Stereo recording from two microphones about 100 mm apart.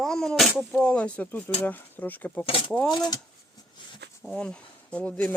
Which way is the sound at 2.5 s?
65° left (ahead or behind).